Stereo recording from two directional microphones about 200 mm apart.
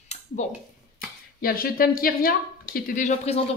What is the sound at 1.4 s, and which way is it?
Speech, 45° left (ahead or behind).